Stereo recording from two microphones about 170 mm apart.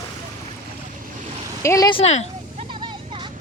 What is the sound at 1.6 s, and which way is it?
Speech, 20° left (ahead or behind).